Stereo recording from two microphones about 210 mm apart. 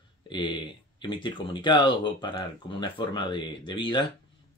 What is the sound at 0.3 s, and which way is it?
Speech, 20° left (ahead or behind).